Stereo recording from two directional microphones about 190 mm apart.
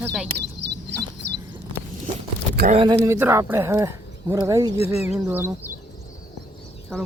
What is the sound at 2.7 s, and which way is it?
Speech, 20° right (ahead or behind).